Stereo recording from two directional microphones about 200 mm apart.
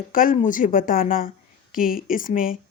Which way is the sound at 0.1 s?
45° left (ahead or behind).